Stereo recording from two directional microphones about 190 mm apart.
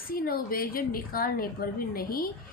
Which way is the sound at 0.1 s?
50° left (ahead or behind).